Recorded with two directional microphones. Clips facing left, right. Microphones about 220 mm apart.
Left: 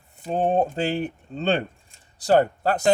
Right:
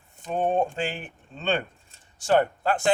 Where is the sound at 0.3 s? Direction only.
35° left (ahead or behind).